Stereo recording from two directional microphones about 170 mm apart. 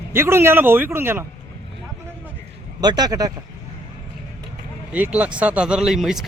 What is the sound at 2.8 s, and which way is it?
Speech, 25° right (ahead or behind).